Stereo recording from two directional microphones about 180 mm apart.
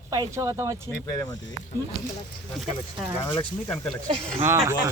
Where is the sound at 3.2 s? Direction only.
25° left (ahead or behind).